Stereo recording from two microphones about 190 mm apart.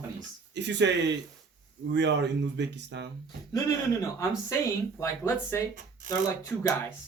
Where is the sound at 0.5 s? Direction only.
65° right (ahead or behind).